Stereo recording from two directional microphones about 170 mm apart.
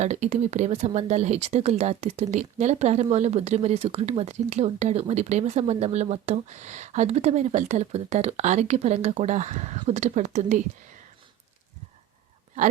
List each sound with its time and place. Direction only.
0.0 s speech: 40° right (ahead or behind)